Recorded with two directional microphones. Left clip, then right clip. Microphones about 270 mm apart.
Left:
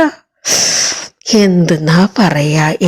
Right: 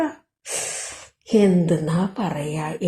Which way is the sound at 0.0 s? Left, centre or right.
Left.